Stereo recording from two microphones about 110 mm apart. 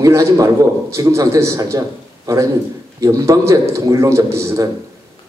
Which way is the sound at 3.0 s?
25° right (ahead or behind).